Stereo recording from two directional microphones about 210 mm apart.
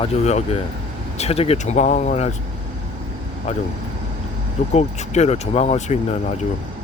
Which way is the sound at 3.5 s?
30° left (ahead or behind).